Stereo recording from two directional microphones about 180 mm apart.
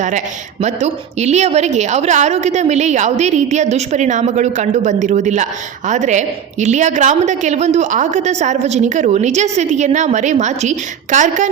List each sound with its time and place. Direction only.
0.6 s a woman's voice: 40° right (ahead or behind)